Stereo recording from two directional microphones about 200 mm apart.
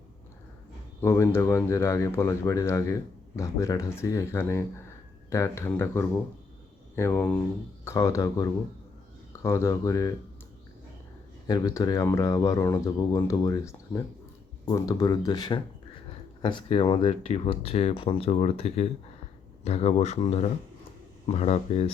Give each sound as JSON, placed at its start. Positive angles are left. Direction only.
{"t": 1.0, "sound": "speech", "side_deg": 15}
{"t": 11.4, "sound": "speech", "side_deg": 15}